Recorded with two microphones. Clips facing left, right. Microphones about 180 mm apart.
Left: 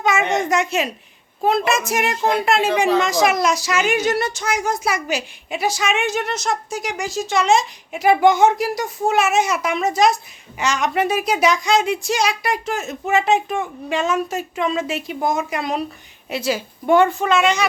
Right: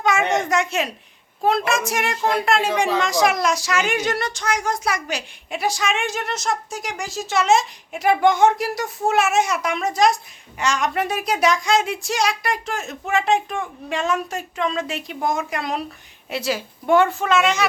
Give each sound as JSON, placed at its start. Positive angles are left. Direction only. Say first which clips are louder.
{"t": 0.0, "sound": "a woman's voice", "louder": "left 1 dB", "side_deg": 0}